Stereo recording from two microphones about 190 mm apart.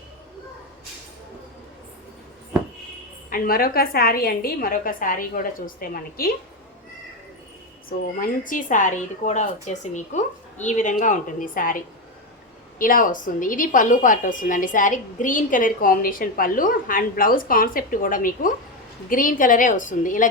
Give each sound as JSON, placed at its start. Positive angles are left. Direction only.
{"t": 3.2, "sound": "a woman's voice", "side_deg": 50}
{"t": 7.9, "sound": "a woman's voice", "side_deg": 45}
{"t": 12.8, "sound": "a woman's voice", "side_deg": 45}